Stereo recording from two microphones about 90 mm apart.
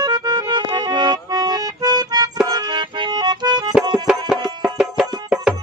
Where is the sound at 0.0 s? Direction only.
50° right (ahead or behind).